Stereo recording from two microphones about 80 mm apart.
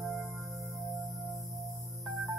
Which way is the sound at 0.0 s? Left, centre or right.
Centre.